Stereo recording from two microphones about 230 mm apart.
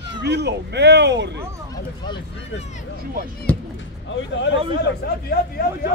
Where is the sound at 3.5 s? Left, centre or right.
Centre.